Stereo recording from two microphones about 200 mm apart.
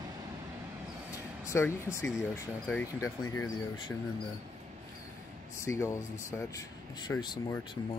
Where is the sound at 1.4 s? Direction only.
15° left (ahead or behind).